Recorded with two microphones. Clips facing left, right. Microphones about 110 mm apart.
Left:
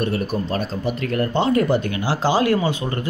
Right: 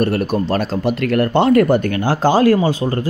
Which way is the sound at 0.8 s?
65° right (ahead or behind).